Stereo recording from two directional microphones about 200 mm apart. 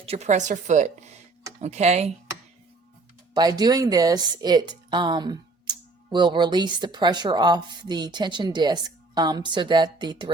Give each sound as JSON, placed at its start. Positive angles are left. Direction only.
{"t": 0.0, "sound": "speech", "side_deg": -30}
{"t": 3.3, "sound": "a woman's voice", "side_deg": -20}